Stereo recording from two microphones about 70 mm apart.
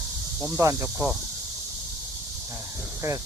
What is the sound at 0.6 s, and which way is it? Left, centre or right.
Speech, right.